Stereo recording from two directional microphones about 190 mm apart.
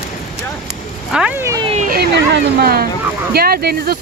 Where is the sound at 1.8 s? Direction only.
55° right (ahead or behind).